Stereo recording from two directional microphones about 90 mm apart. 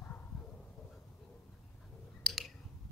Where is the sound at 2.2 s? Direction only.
Centre (ahead or behind).